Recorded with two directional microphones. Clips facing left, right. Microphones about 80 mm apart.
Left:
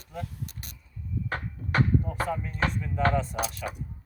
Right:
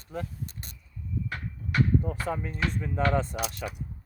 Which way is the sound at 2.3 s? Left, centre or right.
Right.